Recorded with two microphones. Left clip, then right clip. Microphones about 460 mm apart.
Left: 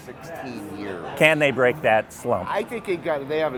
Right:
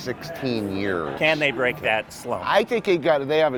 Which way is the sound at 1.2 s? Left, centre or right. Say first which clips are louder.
Left 4 dB; left.